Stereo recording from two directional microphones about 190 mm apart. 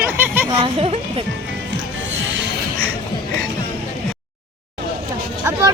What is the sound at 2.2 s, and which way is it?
Music, 80° right.